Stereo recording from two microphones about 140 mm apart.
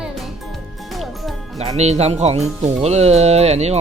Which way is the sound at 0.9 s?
Centre (ahead or behind).